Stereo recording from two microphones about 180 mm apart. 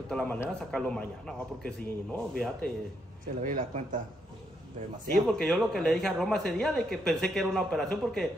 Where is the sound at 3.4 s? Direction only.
45° right (ahead or behind).